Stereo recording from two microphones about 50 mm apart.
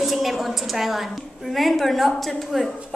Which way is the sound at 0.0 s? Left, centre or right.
Centre.